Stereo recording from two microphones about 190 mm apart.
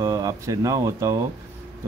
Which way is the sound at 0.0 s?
20° right (ahead or behind).